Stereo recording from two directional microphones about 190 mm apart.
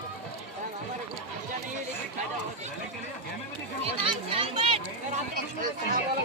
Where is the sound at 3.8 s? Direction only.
30° right (ahead or behind).